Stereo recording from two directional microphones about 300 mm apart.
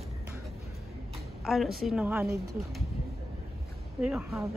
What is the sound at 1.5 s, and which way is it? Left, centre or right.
Speech, centre.